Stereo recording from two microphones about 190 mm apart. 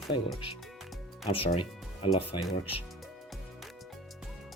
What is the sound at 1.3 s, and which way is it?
Speech, 30° left (ahead or behind).